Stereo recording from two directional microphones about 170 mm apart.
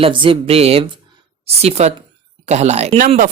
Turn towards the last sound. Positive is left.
turn(degrees=-55)  # may be behind; listen again after turning